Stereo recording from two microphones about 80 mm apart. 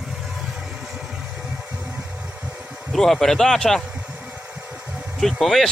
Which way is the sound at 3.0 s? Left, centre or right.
Centre.